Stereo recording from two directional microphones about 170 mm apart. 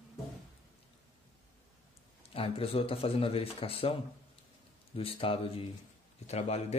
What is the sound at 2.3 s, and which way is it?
Speech, 35° left (ahead or behind).